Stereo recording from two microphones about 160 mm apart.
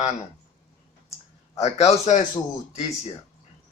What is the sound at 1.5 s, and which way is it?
Speech, 40° left (ahead or behind).